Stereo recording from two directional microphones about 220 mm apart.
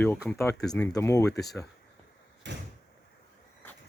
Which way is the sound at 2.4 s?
55° right (ahead or behind).